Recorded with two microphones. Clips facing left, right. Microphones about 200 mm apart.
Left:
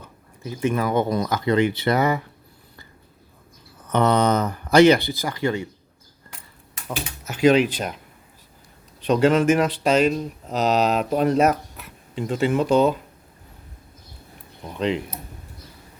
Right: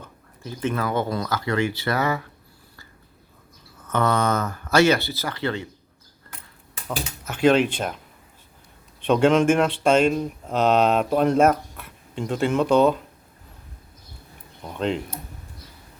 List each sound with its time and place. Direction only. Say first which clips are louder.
0.4 s speech: left 3 dB; 10° left (ahead or behind)
3.8 s speech: left 3 dB; 20° left (ahead or behind)
6.8 s speech: right 1 dB; 5° left (ahead or behind)
9.1 s speech: even; 5° left (ahead or behind)
14.8 s speech: left 1 dB; centre (ahead or behind)